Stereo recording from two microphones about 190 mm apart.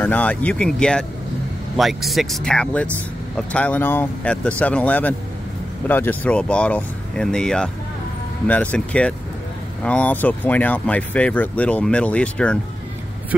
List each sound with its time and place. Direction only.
0.0 s speech: 10° left (ahead or behind)